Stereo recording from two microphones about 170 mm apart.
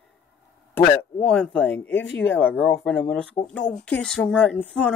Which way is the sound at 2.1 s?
90° left.